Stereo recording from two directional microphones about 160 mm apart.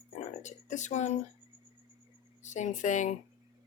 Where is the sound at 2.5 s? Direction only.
50° left (ahead or behind).